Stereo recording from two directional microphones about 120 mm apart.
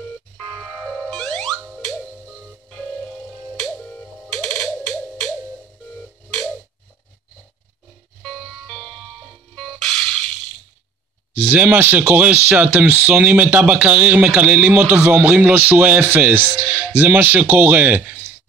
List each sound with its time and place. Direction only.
0.4 s music: 10° left (ahead or behind)
8.2 s music: 10° left (ahead or behind)
11.3 s speech: 15° right (ahead or behind)